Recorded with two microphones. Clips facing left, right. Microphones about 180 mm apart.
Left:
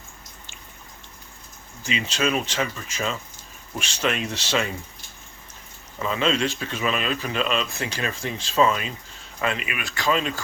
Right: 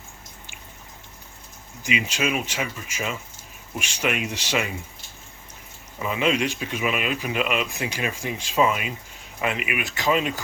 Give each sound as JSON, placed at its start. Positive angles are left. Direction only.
{"t": 1.8, "sound": "speech", "side_deg": -15}
{"t": 6.0, "sound": "speech", "side_deg": -15}